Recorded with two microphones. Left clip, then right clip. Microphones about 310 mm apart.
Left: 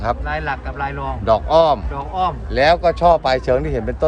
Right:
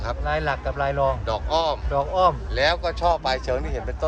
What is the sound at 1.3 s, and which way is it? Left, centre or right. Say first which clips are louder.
Speech: left 10 dB; centre.